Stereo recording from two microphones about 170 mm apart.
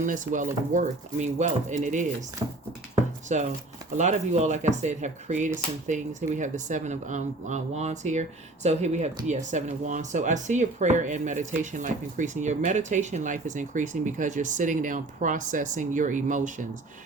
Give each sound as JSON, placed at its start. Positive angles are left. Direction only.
{"t": 0.0, "sound": "speech", "side_deg": -50}
{"t": 3.3, "sound": "speech", "side_deg": -45}